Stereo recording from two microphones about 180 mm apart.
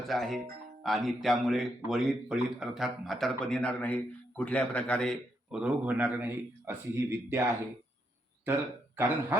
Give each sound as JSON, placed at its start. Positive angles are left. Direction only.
{"t": 0.1, "sound": "speech", "side_deg": 0}
{"t": 9.0, "sound": "speech", "side_deg": -10}